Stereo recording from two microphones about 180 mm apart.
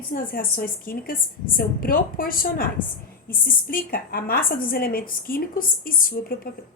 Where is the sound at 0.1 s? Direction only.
55° left (ahead or behind).